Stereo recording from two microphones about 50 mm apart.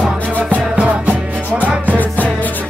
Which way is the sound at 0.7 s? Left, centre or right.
Right.